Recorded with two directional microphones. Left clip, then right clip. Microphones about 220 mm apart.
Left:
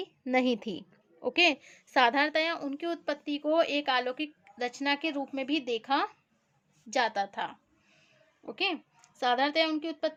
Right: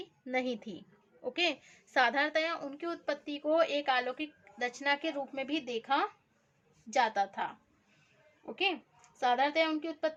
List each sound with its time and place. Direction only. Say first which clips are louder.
0.0 s a woman's voice: left 6 dB; 40° left (ahead or behind)
8.5 s a woman's voice: left 1 dB; 45° left (ahead or behind)